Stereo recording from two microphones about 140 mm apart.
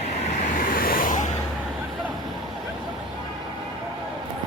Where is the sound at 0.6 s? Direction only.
90° left; by 1.3 s 70° left (ahead or behind).